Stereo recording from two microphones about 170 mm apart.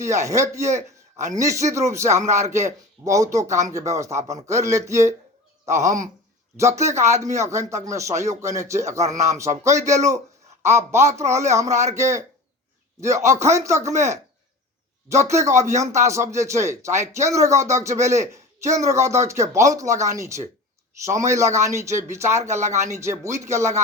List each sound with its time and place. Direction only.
0.0 s a man's voice: 15° right (ahead or behind)
6.6 s speech: 15° right (ahead or behind)
8.3 s speech: 45° right (ahead or behind)
8.5 s speech: 15° right (ahead or behind)
9.0 s speech: 40° right (ahead or behind)
9.4 s speech: 15° right (ahead or behind)